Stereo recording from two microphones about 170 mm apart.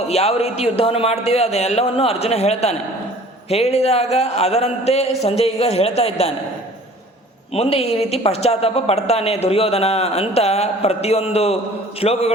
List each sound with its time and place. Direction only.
0.1 s a woman's voice: 40° left (ahead or behind)
7.5 s a woman's voice: 35° left (ahead or behind)